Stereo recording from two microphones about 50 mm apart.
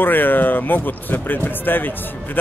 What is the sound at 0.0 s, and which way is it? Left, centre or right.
Speech, left.